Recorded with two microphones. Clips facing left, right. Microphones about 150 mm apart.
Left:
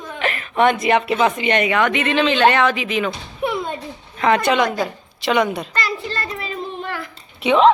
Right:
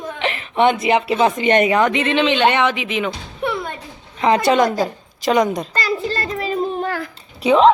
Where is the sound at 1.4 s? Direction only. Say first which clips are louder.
Right 3 dB; 45° right (ahead or behind); by 3.1 s 20° right (ahead or behind).